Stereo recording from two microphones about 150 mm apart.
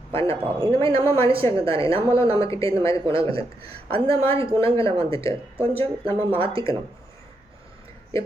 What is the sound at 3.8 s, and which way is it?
Speech, 40° right (ahead or behind).